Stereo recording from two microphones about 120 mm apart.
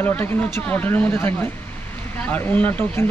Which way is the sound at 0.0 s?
15° left (ahead or behind).